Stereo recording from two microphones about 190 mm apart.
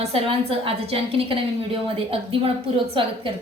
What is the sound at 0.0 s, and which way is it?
A woman's voice, 30° right (ahead or behind).